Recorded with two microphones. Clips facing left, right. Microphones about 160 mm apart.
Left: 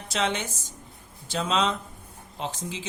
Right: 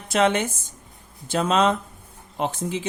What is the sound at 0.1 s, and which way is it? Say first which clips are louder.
Speech: right 8 dB; 55° right (ahead or behind).